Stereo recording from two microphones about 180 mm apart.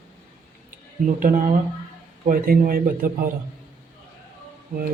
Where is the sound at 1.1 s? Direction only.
50° right (ahead or behind).